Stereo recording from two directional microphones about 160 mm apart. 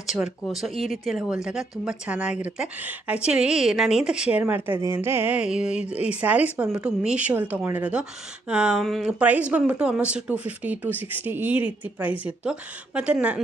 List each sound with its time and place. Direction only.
0.0 s speech: centre (ahead or behind)